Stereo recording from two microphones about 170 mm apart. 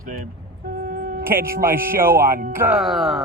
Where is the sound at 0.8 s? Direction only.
55° right (ahead or behind).